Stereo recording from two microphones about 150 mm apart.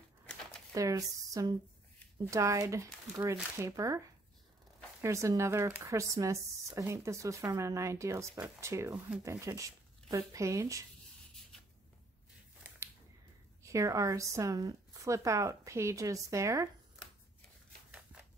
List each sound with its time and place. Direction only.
0.7 s speech: 25° right (ahead or behind)
5.0 s speech: 20° right (ahead or behind)
12.6 s a sound: 15° right (ahead or behind)
13.6 s speech: 20° right (ahead or behind)